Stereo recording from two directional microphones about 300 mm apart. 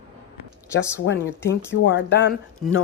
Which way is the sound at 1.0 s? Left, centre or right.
Left.